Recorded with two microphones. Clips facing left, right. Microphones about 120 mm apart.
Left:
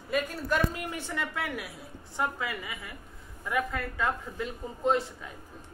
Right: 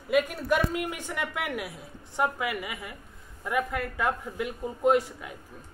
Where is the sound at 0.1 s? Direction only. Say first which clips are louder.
Right 4 dB; 15° right (ahead or behind).